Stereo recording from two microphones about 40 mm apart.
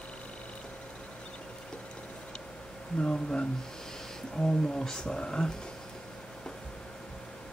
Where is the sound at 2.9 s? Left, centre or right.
Left.